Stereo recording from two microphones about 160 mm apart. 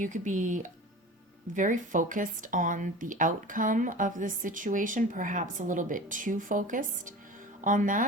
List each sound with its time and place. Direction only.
0.0 s speech: 50° right (ahead or behind)